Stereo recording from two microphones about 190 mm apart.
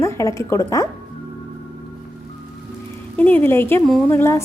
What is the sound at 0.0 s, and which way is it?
Speech, 15° left (ahead or behind).